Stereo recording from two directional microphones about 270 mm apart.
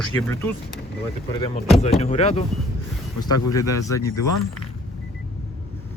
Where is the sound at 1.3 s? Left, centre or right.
Centre.